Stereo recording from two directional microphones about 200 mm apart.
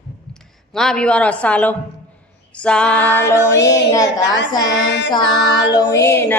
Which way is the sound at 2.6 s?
5° left (ahead or behind).